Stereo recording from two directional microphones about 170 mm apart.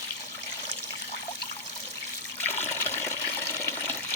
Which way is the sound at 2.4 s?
15° left (ahead or behind).